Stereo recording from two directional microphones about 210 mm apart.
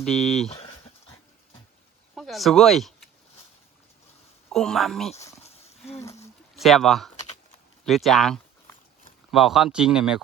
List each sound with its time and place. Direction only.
0.0 s speech: centre (ahead or behind)
0.4 s a sound: 30° left (ahead or behind)
2.1 s speech: centre (ahead or behind)
4.5 s speech: centre (ahead or behind)
5.4 s a sound: 30° left (ahead or behind)
6.0 s speech: 15° left (ahead or behind)
6.6 s speech: centre (ahead or behind)